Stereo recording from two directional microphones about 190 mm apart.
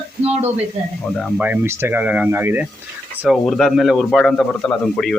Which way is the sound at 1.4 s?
10° right (ahead or behind).